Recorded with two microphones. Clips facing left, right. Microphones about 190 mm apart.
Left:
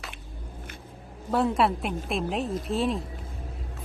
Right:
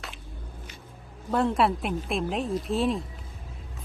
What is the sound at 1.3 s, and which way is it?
Speech, centre (ahead or behind).